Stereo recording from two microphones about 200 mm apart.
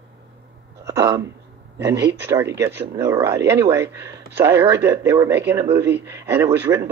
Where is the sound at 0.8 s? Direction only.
15° right (ahead or behind).